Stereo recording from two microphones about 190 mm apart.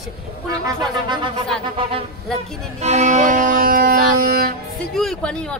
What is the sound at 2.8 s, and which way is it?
Music, 40° right (ahead or behind).